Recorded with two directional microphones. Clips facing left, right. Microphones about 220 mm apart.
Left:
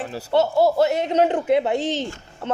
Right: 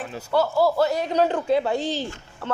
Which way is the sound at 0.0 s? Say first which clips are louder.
Left 3 dB; 35° left (ahead or behind).